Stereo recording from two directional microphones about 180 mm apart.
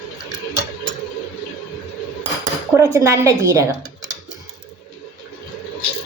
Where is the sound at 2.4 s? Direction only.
20° right (ahead or behind).